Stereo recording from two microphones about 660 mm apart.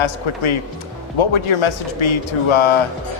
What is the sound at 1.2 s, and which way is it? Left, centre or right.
Speech, left.